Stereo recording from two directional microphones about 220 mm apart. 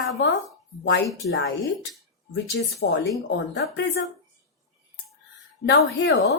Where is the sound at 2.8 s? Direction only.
50° left (ahead or behind).